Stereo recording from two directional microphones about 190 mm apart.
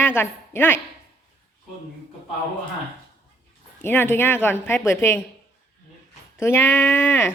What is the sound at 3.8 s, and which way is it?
Speech, 10° left (ahead or behind).